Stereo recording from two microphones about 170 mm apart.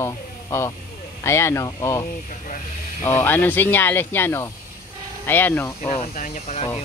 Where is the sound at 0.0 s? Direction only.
15° left (ahead or behind).